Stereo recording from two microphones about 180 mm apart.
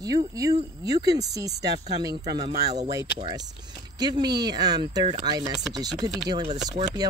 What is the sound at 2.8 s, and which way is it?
Speech, 20° right (ahead or behind).